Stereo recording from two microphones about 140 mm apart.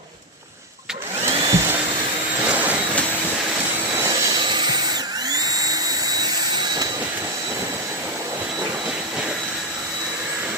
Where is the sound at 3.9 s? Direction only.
20° right (ahead or behind).